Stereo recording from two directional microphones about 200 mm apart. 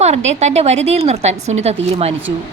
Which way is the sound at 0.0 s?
35° right (ahead or behind).